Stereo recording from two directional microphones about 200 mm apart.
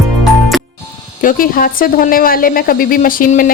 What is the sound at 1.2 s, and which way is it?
A woman's voice, 45° left (ahead or behind).